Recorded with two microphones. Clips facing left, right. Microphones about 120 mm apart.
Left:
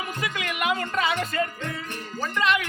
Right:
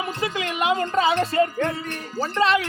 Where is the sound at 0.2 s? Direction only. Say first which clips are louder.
Right 3 dB; 30° right (ahead or behind).